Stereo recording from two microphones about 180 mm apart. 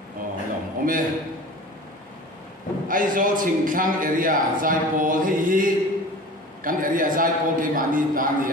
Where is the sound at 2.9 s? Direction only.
50° right (ahead or behind).